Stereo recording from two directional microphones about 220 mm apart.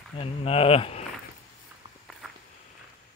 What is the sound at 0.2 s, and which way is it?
Speech, 25° left (ahead or behind).